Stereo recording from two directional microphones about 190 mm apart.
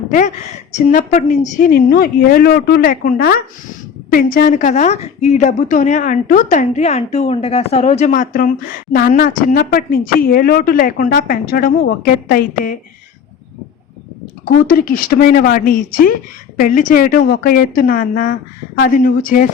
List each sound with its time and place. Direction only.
0.7 s a woman's voice: 40° left (ahead or behind)
14.7 s a woman's voice: 50° left (ahead or behind)